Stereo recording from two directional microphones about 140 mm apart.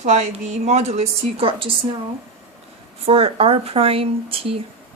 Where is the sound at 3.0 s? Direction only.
40° right (ahead or behind).